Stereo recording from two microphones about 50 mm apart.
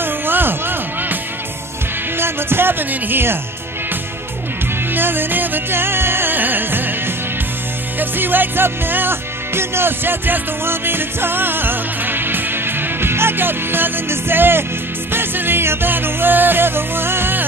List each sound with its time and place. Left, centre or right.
0.0 s music: right
2.1 s music: right
4.9 s music: right
8.0 s music: right